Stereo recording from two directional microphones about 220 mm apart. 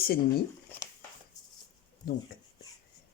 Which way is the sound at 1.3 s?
15° left (ahead or behind).